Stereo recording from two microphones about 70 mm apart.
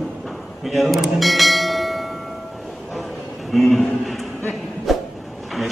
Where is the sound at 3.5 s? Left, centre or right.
Centre.